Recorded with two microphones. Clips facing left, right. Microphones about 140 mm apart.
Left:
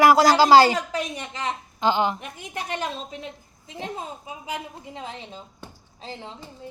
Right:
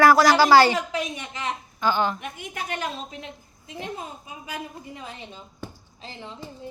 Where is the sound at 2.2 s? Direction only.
35° left (ahead or behind).